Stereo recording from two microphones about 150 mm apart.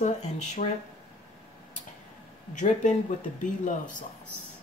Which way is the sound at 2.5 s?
55° left (ahead or behind).